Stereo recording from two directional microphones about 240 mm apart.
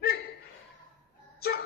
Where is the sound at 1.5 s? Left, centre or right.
Left.